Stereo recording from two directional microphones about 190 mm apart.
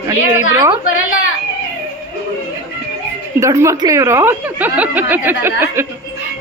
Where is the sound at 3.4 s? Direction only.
15° right (ahead or behind).